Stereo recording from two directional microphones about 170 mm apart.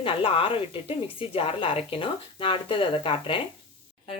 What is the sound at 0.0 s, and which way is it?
Speech, 35° left (ahead or behind).